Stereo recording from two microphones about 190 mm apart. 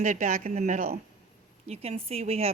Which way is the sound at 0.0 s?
40° right (ahead or behind).